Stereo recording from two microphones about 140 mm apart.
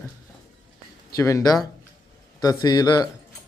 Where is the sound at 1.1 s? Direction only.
25° left (ahead or behind).